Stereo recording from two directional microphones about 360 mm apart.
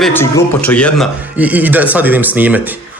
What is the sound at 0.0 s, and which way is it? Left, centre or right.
Speech, centre.